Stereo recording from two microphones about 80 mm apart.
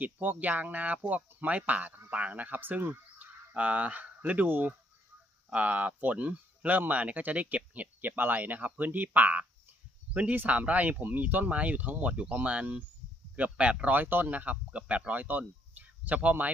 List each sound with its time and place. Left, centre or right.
0.0 s speech: right
13.9 s speech: right